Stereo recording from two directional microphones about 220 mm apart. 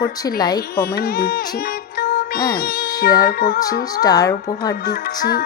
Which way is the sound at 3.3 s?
45° left (ahead or behind).